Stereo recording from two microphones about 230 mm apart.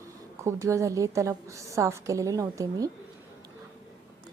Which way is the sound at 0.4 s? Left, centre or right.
Centre.